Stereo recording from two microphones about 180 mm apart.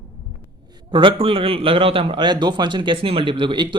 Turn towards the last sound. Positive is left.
turn(degrees=-25)  # may be behind; listen again after turning